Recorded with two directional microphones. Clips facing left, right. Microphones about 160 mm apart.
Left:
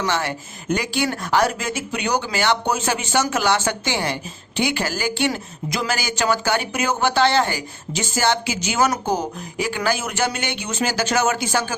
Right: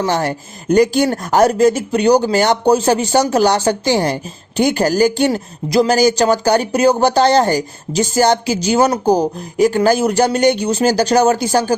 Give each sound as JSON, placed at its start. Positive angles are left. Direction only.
{"t": 0.0, "sound": "speech", "side_deg": -40}